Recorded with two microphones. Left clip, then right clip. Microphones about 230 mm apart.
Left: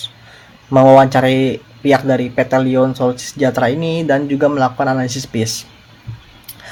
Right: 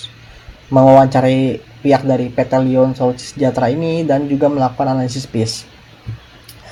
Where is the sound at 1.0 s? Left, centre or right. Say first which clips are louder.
Left 1 dB; left.